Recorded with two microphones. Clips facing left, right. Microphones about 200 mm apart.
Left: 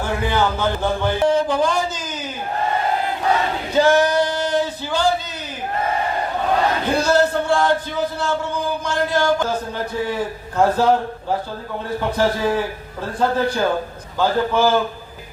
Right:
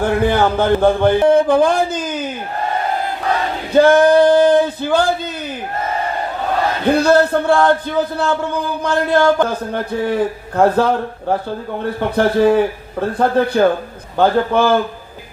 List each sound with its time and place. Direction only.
0.0 s a man's voice: 55° right (ahead or behind)
3.7 s a sound: 55° right (ahead or behind)
6.9 s a man's voice: 60° right (ahead or behind)